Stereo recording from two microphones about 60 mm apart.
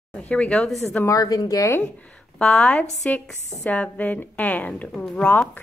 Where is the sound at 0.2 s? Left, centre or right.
Centre.